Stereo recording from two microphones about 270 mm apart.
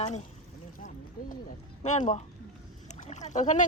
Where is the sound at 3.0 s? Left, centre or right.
Left.